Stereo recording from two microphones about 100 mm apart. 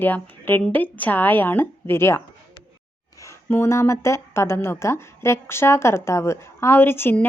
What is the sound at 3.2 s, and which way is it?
A woman's voice, 25° left (ahead or behind).